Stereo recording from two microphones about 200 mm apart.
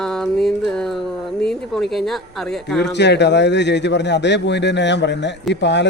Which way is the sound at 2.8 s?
60° left (ahead or behind).